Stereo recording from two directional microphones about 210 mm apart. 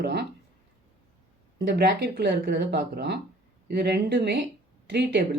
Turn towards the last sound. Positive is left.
turn(degrees=-50)  # may be behind; listen again after turning